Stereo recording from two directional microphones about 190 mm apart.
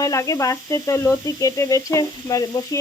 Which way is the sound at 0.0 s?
15° left (ahead or behind).